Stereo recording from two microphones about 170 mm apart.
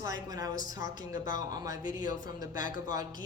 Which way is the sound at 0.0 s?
20° right (ahead or behind).